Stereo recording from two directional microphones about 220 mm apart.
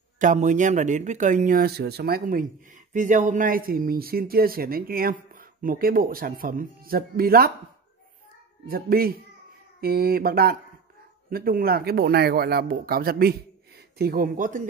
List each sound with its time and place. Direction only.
0.2 s speech: 35° right (ahead or behind)
8.6 s speech: 40° right (ahead or behind)